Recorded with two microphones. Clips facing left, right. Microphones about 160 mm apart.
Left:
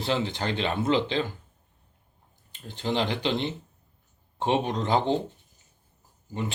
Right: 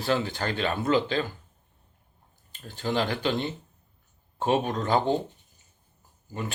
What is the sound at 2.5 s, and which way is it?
Speech, 20° left (ahead or behind).